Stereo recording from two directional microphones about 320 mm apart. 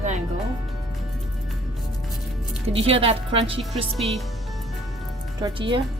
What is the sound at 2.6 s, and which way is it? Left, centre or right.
A woman's voice, centre.